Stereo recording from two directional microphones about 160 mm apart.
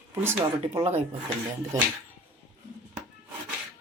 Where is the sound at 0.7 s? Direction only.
40° right (ahead or behind).